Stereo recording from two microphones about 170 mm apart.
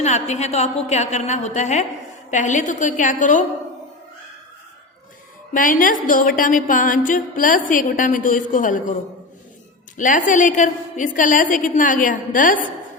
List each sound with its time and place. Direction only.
0.0 s a woman's voice: 40° left (ahead or behind)
5.5 s a woman's voice: 50° left (ahead or behind)
10.0 s a woman's voice: 50° left (ahead or behind)